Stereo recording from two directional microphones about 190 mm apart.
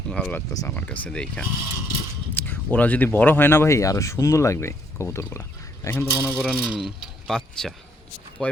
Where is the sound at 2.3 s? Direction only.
10° left (ahead or behind).